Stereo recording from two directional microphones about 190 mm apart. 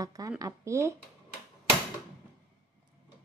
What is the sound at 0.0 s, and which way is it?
Speech, 20° right (ahead or behind).